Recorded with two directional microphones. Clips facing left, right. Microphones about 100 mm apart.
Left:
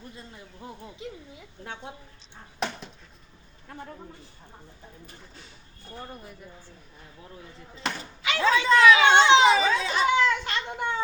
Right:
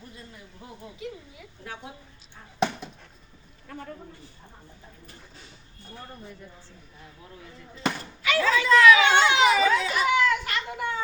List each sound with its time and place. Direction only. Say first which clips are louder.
1.0 s speech: right 2 dB; 25° left (ahead or behind)
3.7 s speech: right 1 dB; 25° left (ahead or behind)
6.1 s speech: even; 10° left (ahead or behind)
8.2 s chatter: even; 25° left (ahead or behind)